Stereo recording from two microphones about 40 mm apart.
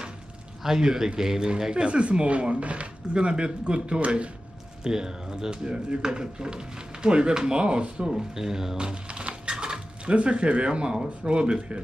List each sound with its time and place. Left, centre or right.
0.7 s speech: centre
1.9 s speech: right
4.8 s speech: centre
8.1 s speech: centre
8.7 s speech: right